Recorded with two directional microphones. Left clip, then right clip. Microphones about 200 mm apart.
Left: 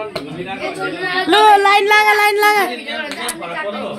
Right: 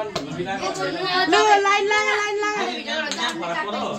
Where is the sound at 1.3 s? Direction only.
35° left (ahead or behind).